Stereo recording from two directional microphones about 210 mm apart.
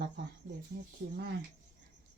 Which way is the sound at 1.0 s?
55° right (ahead or behind).